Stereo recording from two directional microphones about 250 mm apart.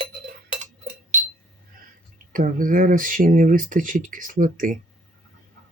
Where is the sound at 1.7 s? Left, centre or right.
Right.